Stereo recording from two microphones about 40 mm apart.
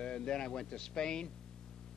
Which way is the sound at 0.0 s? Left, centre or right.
Centre.